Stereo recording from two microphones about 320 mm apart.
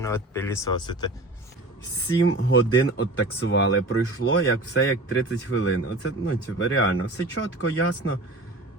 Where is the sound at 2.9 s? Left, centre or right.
Left.